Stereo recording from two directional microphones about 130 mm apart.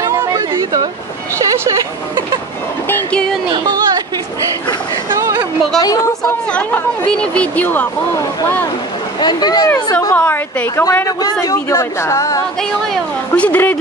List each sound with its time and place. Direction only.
0.0 s a sound: 25° right (ahead or behind)
2.9 s music: 10° left (ahead or behind)
3.5 s chatter: 30° right (ahead or behind)
5.1 s a sound: 25° right (ahead or behind)
5.8 s a woman's voice: 30° left (ahead or behind)
6.5 s speech: 10° left (ahead or behind)
9.2 s speech: 35° left (ahead or behind)
10.1 s a woman's voice: 15° left (ahead or behind)
12.9 s speech: 10° left (ahead or behind)